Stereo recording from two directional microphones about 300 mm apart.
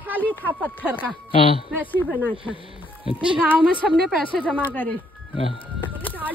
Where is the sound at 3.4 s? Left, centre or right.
Centre.